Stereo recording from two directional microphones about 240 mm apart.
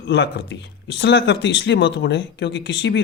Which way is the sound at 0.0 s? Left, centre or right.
Left.